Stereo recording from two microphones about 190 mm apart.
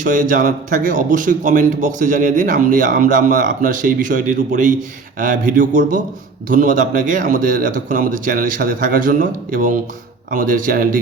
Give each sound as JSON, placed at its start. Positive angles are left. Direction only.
{"t": 0.0, "sound": "a man's voice", "side_deg": -45}